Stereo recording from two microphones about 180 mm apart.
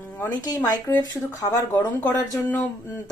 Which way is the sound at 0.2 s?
20° left (ahead or behind).